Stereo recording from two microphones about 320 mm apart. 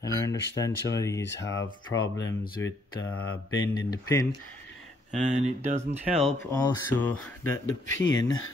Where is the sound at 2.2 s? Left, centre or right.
Left.